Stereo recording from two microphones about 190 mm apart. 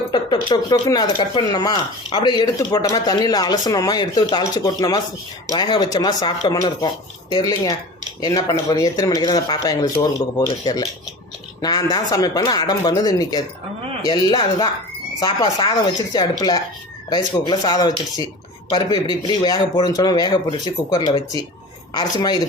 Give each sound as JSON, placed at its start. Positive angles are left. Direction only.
{"t": 0.1, "sound": "speech", "side_deg": 20}